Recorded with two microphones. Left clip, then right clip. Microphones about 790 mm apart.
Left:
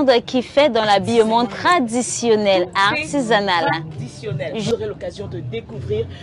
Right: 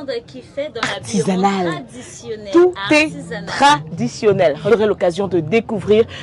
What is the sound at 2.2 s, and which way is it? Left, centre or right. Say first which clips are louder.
A woman's voice: right 1 dB; left.